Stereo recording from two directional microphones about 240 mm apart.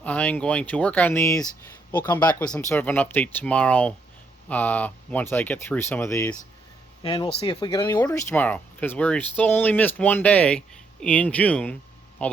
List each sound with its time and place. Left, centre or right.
0.0 s speech: centre